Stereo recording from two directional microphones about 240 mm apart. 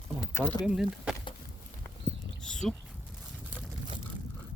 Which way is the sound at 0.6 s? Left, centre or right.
Centre.